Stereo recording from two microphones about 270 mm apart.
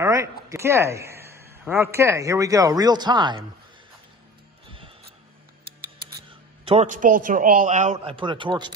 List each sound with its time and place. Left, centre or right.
0.0 s a man's voice: centre
6.6 s a man's voice: right